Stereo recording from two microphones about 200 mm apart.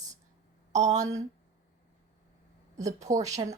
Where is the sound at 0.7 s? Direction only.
35° right (ahead or behind).